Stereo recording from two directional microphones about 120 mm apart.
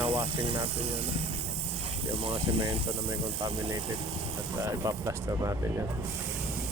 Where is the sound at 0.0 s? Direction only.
50° right (ahead or behind).